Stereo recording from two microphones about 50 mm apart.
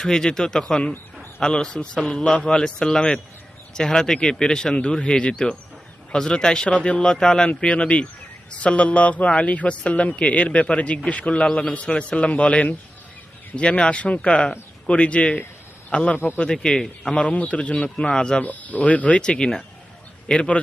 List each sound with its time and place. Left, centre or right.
0.0 s a man's voice: centre
16.1 s speech: left
16.4 s speech: centre
17.2 s a man's voice: left
18.4 s speech: left
19.2 s a man's voice: centre